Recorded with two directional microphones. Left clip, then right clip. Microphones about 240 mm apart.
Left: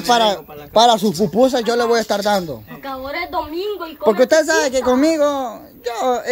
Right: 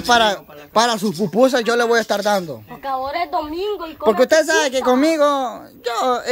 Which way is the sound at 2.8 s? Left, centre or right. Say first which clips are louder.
Right 4 dB; right.